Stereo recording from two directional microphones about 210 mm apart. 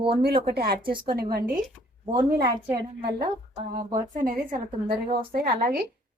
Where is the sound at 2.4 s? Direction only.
15° right (ahead or behind).